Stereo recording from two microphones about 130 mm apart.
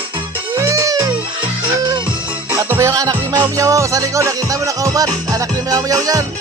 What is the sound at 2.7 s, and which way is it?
Music, 20° right (ahead or behind).